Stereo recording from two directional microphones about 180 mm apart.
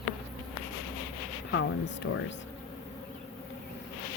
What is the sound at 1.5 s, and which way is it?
Speech, 90° left.